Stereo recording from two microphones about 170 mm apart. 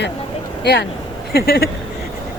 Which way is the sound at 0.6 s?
75° left (ahead or behind).